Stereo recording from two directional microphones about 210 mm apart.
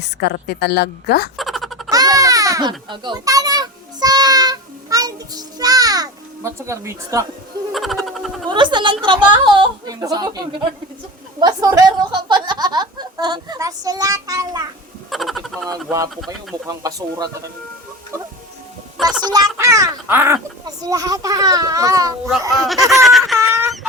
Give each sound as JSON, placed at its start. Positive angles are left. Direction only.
{"t": 0.0, "sound": "a woman's voice", "side_deg": 50}
{"t": 1.4, "sound": "a sound", "side_deg": 0}
{"t": 1.9, "sound": "a sound", "side_deg": -15}
{"t": 7.7, "sound": "a sound", "side_deg": 0}
{"t": 8.4, "sound": "a woman's voice", "side_deg": -20}
{"t": 15.1, "sound": "speech", "side_deg": 0}
{"t": 16.6, "sound": "speech", "side_deg": -15}
{"t": 18.1, "sound": "music", "side_deg": -15}
{"t": 19.2, "sound": "speech", "side_deg": -20}
{"t": 22.6, "sound": "fowl", "side_deg": 0}